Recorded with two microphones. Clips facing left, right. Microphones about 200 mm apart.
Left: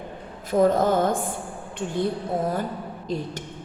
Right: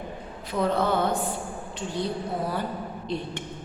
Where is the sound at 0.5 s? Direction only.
45° left (ahead or behind).